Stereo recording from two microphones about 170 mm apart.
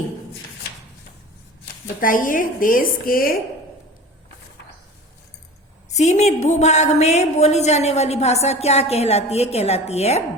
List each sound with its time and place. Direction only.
1.6 s speech: 55° left (ahead or behind)
5.9 s a woman's voice: 40° left (ahead or behind)